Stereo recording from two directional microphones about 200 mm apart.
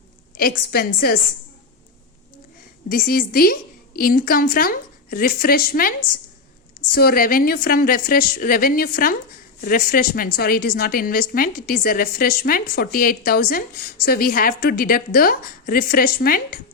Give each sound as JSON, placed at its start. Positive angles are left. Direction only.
{"t": 0.3, "sound": "speech", "side_deg": 50}
{"t": 2.9, "sound": "speech", "side_deg": 45}
{"t": 6.9, "sound": "speech", "side_deg": 50}